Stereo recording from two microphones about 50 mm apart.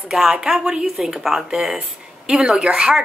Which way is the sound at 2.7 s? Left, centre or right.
Centre.